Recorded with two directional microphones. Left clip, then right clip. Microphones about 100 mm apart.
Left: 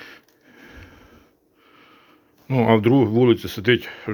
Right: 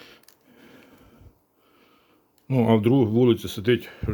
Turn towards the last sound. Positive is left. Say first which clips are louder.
# left 4 dB
turn(degrees=-15)  # may be behind; listen again after turning